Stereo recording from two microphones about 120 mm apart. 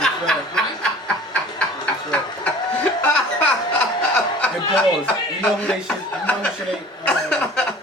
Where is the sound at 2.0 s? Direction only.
10° left (ahead or behind).